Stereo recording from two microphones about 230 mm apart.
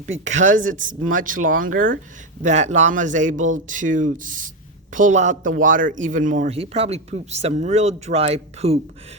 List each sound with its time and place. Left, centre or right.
0.0 s speech: right